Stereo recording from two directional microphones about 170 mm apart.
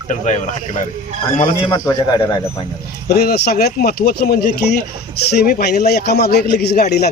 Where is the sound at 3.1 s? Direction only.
70° left (ahead or behind).